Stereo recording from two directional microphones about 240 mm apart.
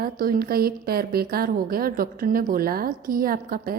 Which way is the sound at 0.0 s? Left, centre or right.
Right.